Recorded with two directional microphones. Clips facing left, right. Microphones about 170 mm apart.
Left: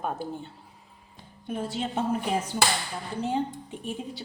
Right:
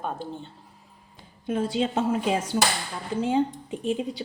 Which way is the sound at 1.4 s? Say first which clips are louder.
Right 6 dB; 90° right.